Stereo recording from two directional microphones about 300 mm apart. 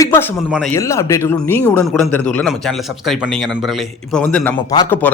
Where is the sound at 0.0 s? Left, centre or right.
Centre.